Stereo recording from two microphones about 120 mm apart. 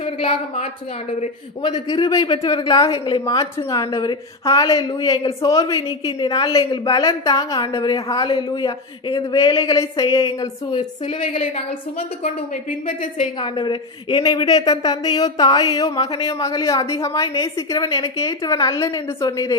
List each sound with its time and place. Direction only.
0.2 s a woman's voice: 50° left (ahead or behind)
1.6 s a woman's voice: 35° left (ahead or behind)
9.2 s a woman's voice: 30° left (ahead or behind)
10.4 s a woman's voice: 45° left (ahead or behind)
13.0 s a woman's voice: 90° left
13.4 s a woman's voice: 45° left (ahead or behind)
14.4 s a woman's voice: 30° left (ahead or behind)